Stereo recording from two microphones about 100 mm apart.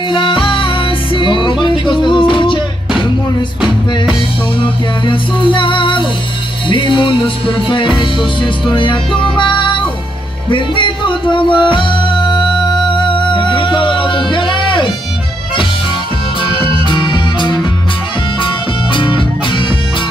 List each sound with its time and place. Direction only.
0.1 s music: 55° left (ahead or behind)
3.6 s music: 5° right (ahead or behind)
4.6 s music: 55° left (ahead or behind)
16.4 s music: 50° left (ahead or behind)
18.9 s music: 55° left (ahead or behind)